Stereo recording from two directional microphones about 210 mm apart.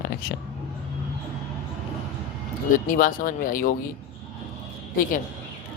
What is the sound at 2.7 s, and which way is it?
Speech, 40° left (ahead or behind).